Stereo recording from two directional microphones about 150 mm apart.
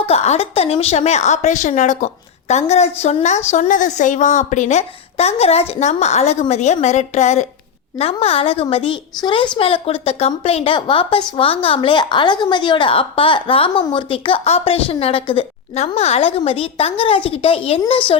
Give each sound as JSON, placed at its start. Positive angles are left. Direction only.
{"t": 0.0, "sound": "a woman's voice", "side_deg": 45}